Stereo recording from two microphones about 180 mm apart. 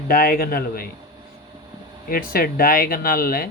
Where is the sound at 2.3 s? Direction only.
55° left (ahead or behind).